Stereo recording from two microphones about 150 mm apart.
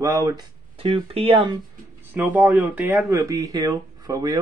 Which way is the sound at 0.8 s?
40° right (ahead or behind).